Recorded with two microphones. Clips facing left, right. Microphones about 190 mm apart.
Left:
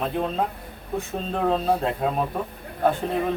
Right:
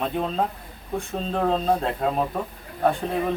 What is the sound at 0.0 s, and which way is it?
Speech, 5° left (ahead or behind).